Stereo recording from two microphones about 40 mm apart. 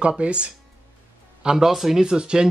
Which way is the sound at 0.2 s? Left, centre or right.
Right.